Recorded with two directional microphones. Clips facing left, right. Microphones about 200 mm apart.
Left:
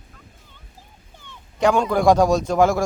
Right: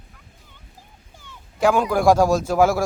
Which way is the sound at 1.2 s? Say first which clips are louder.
Even; 5° right (ahead or behind).